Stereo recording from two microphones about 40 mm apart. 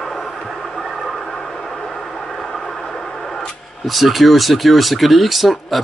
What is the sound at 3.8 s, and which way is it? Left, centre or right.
Speech, centre.